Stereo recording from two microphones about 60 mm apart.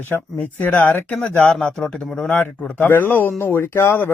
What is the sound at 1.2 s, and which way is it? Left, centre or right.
A man's voice, centre.